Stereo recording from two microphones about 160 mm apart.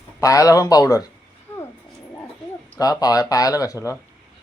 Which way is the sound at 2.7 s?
25° left (ahead or behind).